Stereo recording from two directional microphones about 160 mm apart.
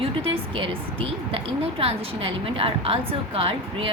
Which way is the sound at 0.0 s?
35° right (ahead or behind).